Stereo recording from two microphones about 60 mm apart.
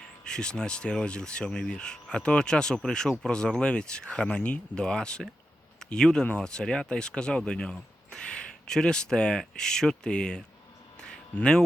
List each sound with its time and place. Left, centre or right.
0.3 s speech: centre